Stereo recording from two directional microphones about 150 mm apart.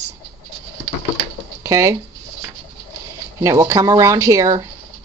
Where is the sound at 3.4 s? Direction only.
20° right (ahead or behind).